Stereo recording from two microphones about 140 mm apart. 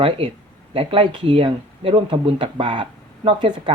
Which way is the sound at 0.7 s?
40° right (ahead or behind).